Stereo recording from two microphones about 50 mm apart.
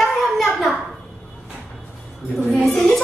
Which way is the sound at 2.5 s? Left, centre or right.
Left.